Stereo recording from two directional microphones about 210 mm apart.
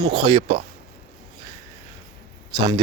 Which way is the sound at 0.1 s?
25° right (ahead or behind).